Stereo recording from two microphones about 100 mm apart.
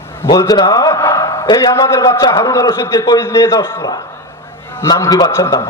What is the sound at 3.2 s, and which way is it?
Speech, 25° left (ahead or behind).